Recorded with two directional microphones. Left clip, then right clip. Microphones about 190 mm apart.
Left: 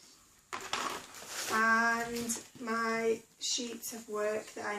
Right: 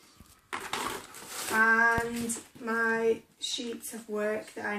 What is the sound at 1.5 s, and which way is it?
Child singing, 40° left (ahead or behind).